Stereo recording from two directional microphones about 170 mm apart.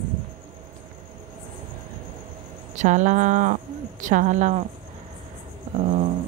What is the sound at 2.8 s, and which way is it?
Speech, 45° right (ahead or behind).